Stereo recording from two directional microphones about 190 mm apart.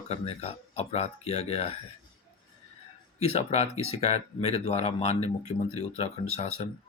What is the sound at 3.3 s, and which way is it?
Speech, 35° left (ahead or behind).